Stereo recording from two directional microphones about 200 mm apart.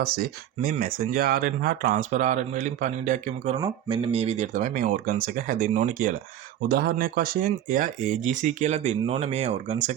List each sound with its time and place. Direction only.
0.0 s speech: 50° right (ahead or behind); by 9.9 s 35° right (ahead or behind)